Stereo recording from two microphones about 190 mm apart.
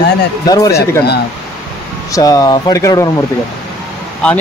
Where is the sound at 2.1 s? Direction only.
20° left (ahead or behind).